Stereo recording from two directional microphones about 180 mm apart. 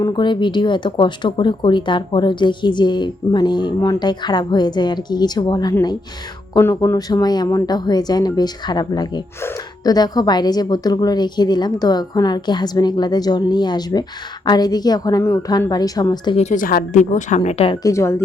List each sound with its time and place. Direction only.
0.0 s speech: 25° left (ahead or behind)
16.4 s speech: 45° left (ahead or behind)
17.8 s speech: 15° left (ahead or behind)